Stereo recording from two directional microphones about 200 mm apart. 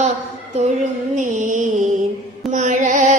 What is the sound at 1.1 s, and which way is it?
Music, 40° right (ahead or behind).